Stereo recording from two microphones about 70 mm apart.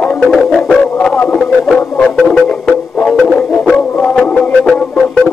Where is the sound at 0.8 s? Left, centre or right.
Centre.